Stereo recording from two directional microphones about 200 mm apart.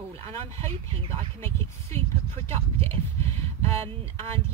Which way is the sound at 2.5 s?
30° right (ahead or behind).